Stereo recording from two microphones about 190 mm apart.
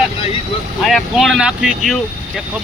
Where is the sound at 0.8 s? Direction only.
Centre (ahead or behind).